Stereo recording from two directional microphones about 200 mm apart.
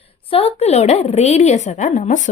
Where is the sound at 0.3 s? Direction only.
30° left (ahead or behind).